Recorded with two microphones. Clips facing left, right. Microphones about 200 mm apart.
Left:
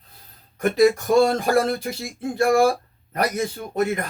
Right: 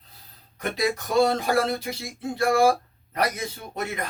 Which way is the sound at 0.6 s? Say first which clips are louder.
Left 9 dB; 50° left (ahead or behind).